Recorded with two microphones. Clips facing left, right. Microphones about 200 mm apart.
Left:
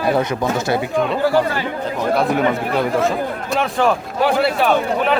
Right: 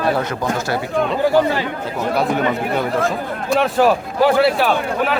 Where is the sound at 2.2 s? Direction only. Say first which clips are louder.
Right 1 dB; centre (ahead or behind).